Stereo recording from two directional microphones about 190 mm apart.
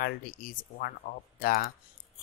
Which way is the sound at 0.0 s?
50° left (ahead or behind).